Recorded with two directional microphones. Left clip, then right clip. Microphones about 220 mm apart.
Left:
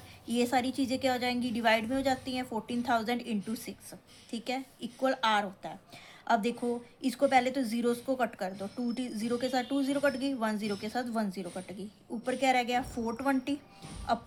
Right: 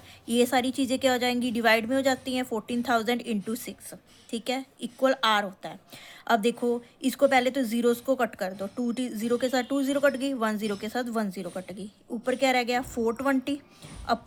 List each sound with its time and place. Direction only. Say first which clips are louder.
0.3 s a woman's voice: right 5 dB; 30° right (ahead or behind)